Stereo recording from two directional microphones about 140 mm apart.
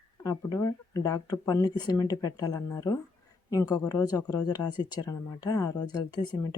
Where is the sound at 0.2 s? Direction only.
25° left (ahead or behind).